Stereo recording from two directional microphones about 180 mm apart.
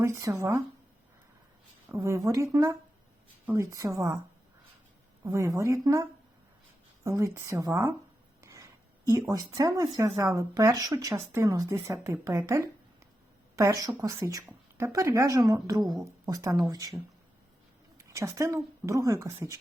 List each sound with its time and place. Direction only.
0.0 s speech: 15° right (ahead or behind)
1.9 s speech: 15° right (ahead or behind)
5.2 s speech: 15° right (ahead or behind)
8.4 s a sound: 15° right (ahead or behind)
9.3 s a woman's voice: 20° right (ahead or behind)
17.9 s a woman's voice: 15° right (ahead or behind)